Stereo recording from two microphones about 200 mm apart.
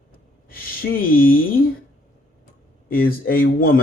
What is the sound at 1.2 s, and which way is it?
Speech, 45° left (ahead or behind).